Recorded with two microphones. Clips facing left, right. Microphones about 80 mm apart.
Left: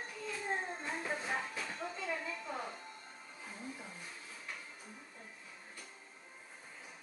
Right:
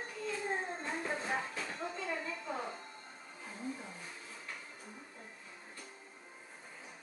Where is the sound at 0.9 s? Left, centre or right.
Centre.